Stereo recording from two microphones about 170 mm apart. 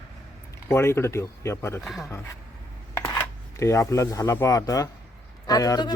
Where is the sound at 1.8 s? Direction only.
Centre (ahead or behind).